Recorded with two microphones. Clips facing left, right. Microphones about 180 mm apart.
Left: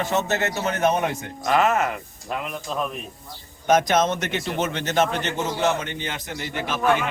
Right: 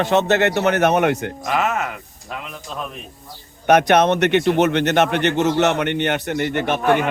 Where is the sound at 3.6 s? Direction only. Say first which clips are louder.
Right 5 dB; 65° right (ahead or behind).